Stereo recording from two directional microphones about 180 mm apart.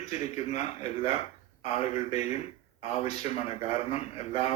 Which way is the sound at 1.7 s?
35° left (ahead or behind).